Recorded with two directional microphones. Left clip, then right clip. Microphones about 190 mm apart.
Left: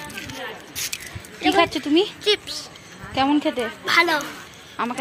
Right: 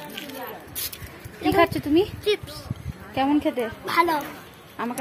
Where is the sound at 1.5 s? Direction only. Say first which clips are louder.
Left 1 dB; 15° left (ahead or behind).